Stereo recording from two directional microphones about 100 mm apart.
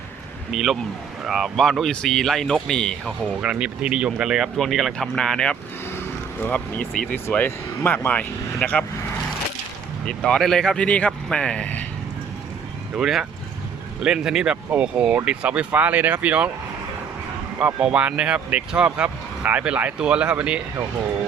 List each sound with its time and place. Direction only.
0.5 s speech: 5° right (ahead or behind)
3.1 s speech: 10° right (ahead or behind); by 8.8 s 10° left (ahead or behind)
10.1 s speech: 5° left (ahead or behind)
13.0 s speech: centre (ahead or behind)
17.6 s speech: 10° right (ahead or behind)